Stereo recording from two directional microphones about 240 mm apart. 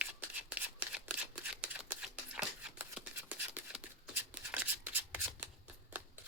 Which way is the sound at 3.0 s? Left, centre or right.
Centre.